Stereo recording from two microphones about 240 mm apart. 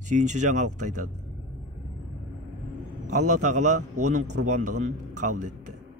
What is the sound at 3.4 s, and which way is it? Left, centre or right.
Speech, right.